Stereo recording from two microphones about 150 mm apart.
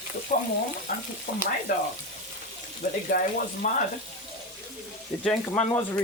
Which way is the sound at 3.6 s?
55° left (ahead or behind).